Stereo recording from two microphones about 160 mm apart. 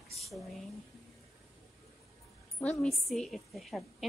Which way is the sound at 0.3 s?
Centre (ahead or behind).